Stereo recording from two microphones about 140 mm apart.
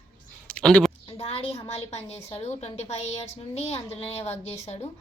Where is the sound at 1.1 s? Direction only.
45° left (ahead or behind).